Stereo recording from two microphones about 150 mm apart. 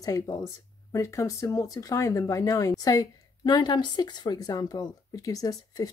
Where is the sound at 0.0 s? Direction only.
20° left (ahead or behind).